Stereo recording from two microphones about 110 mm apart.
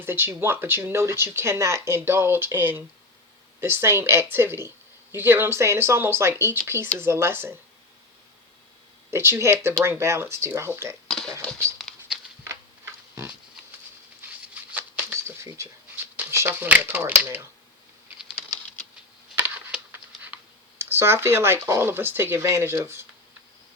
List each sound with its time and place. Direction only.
0.0 s speech: 20° right (ahead or behind)
9.0 s speech: 25° right (ahead or behind)
11.1 s a sound: 5° left (ahead or behind)
11.8 s patter: centre (ahead or behind)
12.5 s a sound: 25° right (ahead or behind)
14.7 s shuffling cards: 15° right (ahead or behind)
16.1 s speech: 20° right (ahead or behind)
19.7 s patter: 5° right (ahead or behind)
20.7 s speech: 20° right (ahead or behind)